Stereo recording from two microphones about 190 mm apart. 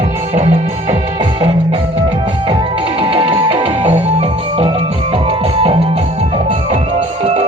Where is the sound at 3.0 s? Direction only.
30° right (ahead or behind).